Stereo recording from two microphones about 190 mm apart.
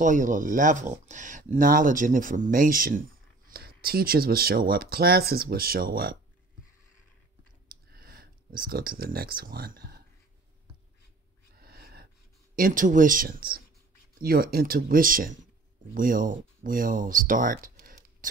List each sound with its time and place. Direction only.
0.0 s speech: 45° right (ahead or behind)
7.6 s a sound: 50° right (ahead or behind)
11.6 s cat: 55° right (ahead or behind)
12.5 s speech: 45° right (ahead or behind)